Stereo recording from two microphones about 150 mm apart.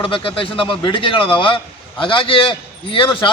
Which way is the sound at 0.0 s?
35° left (ahead or behind).